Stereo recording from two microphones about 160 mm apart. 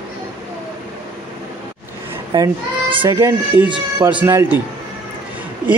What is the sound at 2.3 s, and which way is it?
A child's voice, 30° right (ahead or behind).